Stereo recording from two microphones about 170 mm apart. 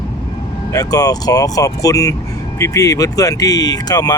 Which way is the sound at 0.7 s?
20° left (ahead or behind).